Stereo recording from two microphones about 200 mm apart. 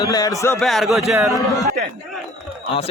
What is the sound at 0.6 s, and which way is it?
Speech, centre (ahead or behind).